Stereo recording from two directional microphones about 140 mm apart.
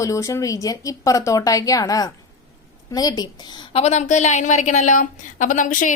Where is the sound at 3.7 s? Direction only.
50° left (ahead or behind); by 5.9 s 65° left (ahead or behind).